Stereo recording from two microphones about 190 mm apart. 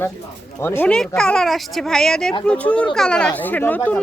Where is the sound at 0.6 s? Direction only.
10° left (ahead or behind).